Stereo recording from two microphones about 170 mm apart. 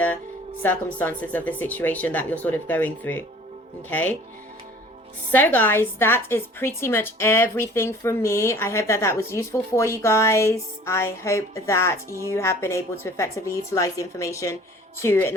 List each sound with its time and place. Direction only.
0.6 s a woman's voice: 10° left (ahead or behind)
5.3 s a woman's voice: 10° left (ahead or behind)